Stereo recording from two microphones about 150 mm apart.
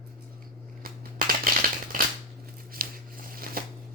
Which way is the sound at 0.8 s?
70° right (ahead or behind).